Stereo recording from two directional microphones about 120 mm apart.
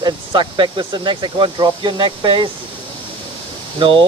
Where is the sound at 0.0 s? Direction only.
40° right (ahead or behind).